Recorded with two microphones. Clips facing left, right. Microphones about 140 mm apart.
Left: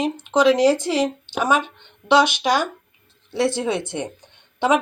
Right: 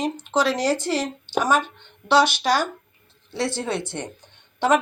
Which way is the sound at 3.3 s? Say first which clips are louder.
Left 5 dB; centre (ahead or behind).